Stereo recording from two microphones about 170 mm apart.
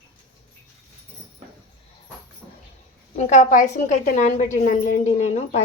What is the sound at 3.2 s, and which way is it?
A woman's voice, 45° left (ahead or behind).